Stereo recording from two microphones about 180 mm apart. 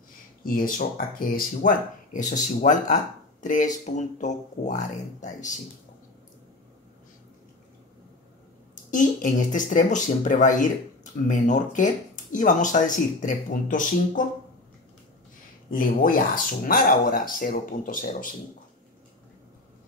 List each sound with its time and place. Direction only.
0.4 s speech: 50° left (ahead or behind)
8.9 s speech: 45° left (ahead or behind)
15.7 s speech: 50° left (ahead or behind)